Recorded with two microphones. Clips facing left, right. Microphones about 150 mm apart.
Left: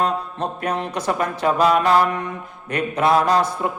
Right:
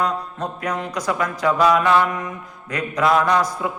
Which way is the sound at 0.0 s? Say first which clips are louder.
Left 1 dB; 30° left (ahead or behind).